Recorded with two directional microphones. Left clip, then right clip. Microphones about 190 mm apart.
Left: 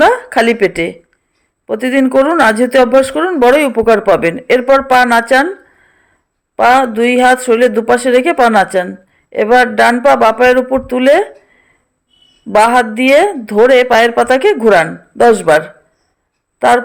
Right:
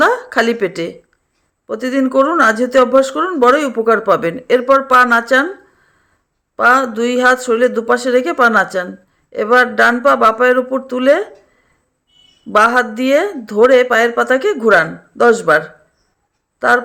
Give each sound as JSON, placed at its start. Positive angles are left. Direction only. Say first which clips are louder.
{"t": 0.0, "sound": "a woman's voice", "louder": "left 4 dB", "side_deg": 10}
{"t": 6.7, "sound": "speech", "louder": "left 3 dB", "side_deg": 10}
{"t": 12.5, "sound": "speech", "louder": "left 3 dB", "side_deg": 10}